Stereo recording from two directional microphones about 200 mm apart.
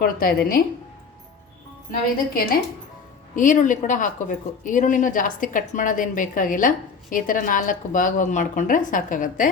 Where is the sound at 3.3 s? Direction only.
40° left (ahead or behind).